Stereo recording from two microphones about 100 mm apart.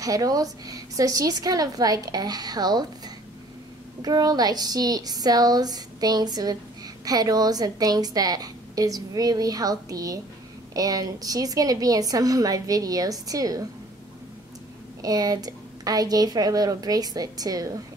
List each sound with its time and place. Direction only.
0.0 s a woman's voice: 35° right (ahead or behind)
4.0 s a woman's voice: 40° right (ahead or behind)
15.0 s a woman's voice: 40° right (ahead or behind)